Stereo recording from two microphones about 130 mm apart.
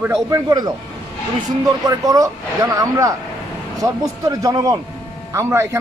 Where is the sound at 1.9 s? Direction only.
25° right (ahead or behind).